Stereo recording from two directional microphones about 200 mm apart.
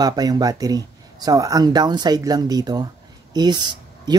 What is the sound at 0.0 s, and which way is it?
Speech, 20° right (ahead or behind).